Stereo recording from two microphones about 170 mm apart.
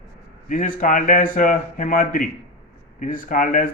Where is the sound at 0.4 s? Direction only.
55° left (ahead or behind).